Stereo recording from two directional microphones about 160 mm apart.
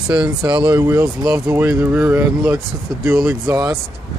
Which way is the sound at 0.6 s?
15° right (ahead or behind).